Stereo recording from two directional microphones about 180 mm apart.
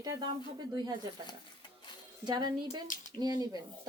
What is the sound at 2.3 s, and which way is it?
Speech, 25° right (ahead or behind).